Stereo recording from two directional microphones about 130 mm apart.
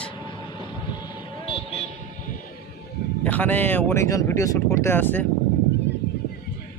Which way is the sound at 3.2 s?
15° left (ahead or behind).